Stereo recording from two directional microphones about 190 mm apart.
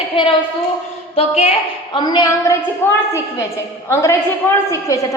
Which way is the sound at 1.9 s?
20° left (ahead or behind).